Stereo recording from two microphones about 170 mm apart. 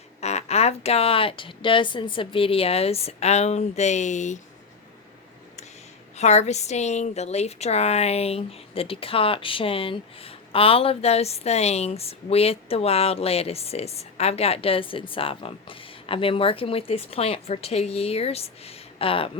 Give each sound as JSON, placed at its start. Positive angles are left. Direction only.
{"t": 0.2, "sound": "a woman's voice", "side_deg": 40}
{"t": 6.1, "sound": "a woman's voice", "side_deg": 40}